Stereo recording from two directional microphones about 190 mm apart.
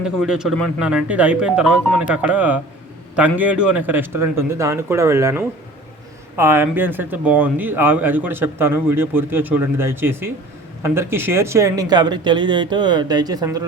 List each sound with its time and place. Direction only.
0.0 s speech: 5° right (ahead or behind); by 13.7 s 20° right (ahead or behind)